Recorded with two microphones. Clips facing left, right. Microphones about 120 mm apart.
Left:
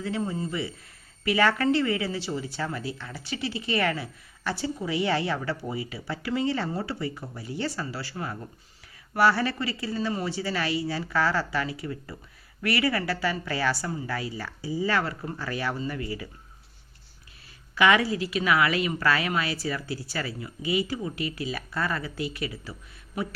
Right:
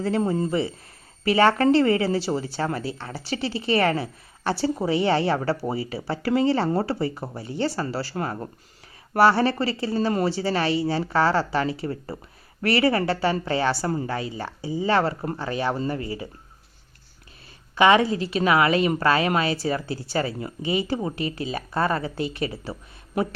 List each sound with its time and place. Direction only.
0.3 s speech: 55° right (ahead or behind)
1.2 s a woman's voice: 30° right (ahead or behind)
8.1 s speech: 55° right (ahead or behind)
9.1 s a woman's voice: 30° right (ahead or behind)
13.8 s speech: 55° right (ahead or behind)
14.1 s speech: 25° right (ahead or behind)
17.7 s speech: 30° right (ahead or behind)